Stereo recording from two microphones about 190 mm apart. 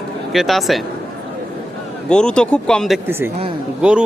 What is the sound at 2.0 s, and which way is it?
Speech, 5° left (ahead or behind).